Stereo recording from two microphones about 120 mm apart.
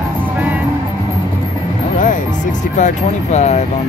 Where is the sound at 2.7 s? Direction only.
80° left.